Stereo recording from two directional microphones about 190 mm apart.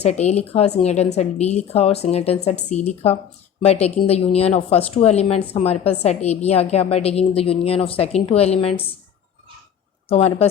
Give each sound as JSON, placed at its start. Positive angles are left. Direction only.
{"t": 0.0, "sound": "speech", "side_deg": 35}
{"t": 10.1, "sound": "speech", "side_deg": 35}